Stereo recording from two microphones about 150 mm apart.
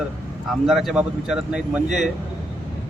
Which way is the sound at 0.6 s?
Centre (ahead or behind).